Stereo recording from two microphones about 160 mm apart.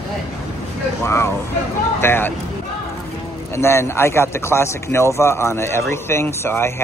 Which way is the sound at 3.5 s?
15° left (ahead or behind).